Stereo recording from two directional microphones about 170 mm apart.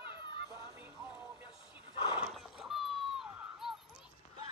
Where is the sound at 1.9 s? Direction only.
25° left (ahead or behind).